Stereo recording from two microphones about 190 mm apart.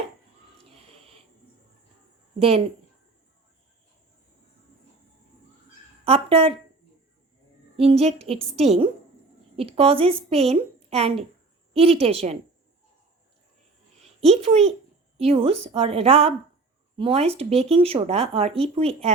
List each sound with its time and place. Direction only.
0.6 s wheeze: 30° right (ahead or behind)
6.1 s speech: 30° right (ahead or behind)
7.8 s speech: 30° right (ahead or behind)
14.2 s speech: 35° right (ahead or behind)